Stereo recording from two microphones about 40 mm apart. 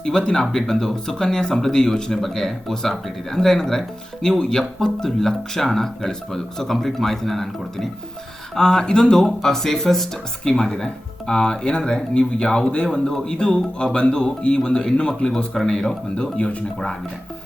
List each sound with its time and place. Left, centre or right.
0.0 s speech: centre
8.5 s speech: centre
9.2 s speech: centre
15.6 s speech: centre
16.1 s speech: left
16.7 s speech: centre